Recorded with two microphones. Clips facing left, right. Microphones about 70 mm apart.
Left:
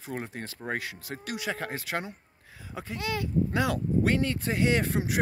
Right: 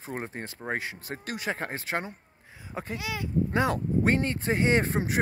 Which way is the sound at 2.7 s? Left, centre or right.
Right.